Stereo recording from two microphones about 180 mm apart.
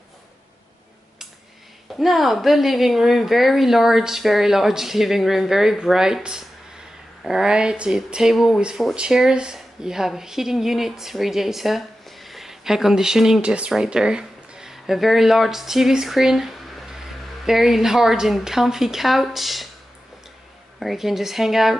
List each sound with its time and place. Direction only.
2.0 s speech: centre (ahead or behind)
20.8 s speech: centre (ahead or behind)